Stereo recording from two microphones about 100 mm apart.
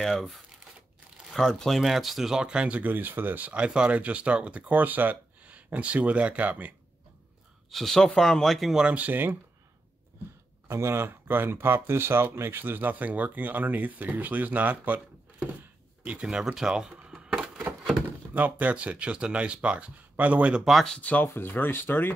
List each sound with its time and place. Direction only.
0.0 s speech: centre (ahead or behind); by 6.7 s 15° right (ahead or behind)
7.7 s speech: 5° left (ahead or behind); by 9.4 s 20° right (ahead or behind)
10.7 s speech: 25° right (ahead or behind)
20.6 s speech: centre (ahead or behind)
21.1 s speech: 20° left (ahead or behind)